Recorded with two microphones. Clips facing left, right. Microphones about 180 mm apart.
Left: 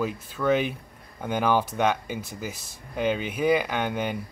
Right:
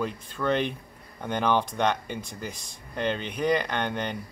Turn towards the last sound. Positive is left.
turn(degrees=5)  # may be behind; listen again after turning